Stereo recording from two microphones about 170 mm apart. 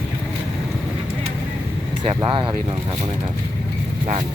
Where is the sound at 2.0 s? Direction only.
30° right (ahead or behind).